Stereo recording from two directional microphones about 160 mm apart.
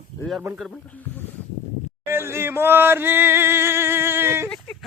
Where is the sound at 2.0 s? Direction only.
15° right (ahead or behind).